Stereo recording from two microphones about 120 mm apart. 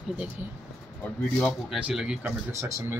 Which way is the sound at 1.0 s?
10° left (ahead or behind).